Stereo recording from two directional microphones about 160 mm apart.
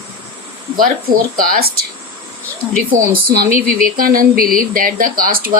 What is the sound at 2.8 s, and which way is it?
Speech, 65° right (ahead or behind).